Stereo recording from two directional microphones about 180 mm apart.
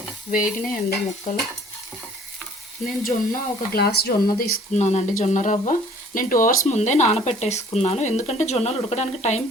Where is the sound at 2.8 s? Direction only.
55° left (ahead or behind).